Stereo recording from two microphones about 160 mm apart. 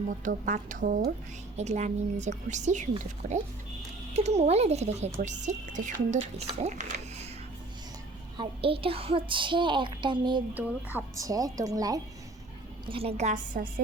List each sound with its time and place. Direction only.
0.1 s speech: 50° right (ahead or behind)
1.5 s a woman's voice: 45° right (ahead or behind)
4.1 s a woman's voice: 45° right (ahead or behind)
8.4 s a woman's voice: 35° right (ahead or behind)
10.5 s speech: 10° right (ahead or behind)
12.8 s a woman's voice: 35° right (ahead or behind); by 13.7 s 55° right (ahead or behind)